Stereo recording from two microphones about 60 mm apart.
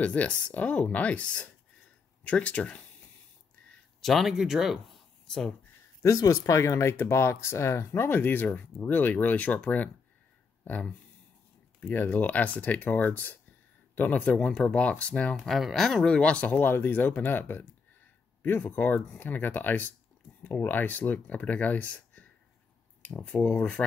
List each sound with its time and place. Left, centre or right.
0.0 s speech: left
4.0 s speech: centre
6.0 s speech: left
15.4 s speech: centre; by 22.3 s left
23.3 s speech: left